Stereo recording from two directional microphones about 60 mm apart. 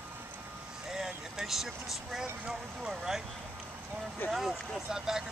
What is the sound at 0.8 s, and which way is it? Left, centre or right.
Speech, centre.